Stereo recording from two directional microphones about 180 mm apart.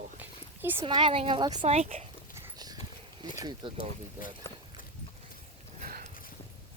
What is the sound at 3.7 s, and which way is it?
Speech, 50° left (ahead or behind).